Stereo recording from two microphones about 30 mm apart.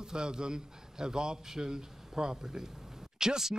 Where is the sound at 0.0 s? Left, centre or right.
Right.